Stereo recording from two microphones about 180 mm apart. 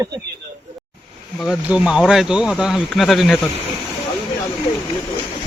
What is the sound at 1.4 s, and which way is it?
Speech, 5° right (ahead or behind).